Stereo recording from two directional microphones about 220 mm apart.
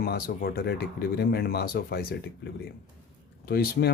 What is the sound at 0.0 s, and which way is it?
Speech, 45° left (ahead or behind).